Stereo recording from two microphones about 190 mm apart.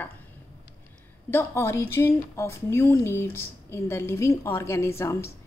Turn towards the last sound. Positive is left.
turn(degrees=15)  # may be behind; listen again after turning